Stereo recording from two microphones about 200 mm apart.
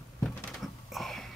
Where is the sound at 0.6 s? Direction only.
Centre (ahead or behind).